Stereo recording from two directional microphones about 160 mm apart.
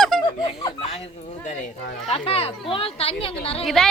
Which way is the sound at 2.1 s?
40° left (ahead or behind).